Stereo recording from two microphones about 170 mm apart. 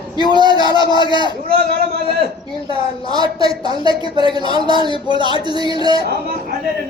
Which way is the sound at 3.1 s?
25° right (ahead or behind).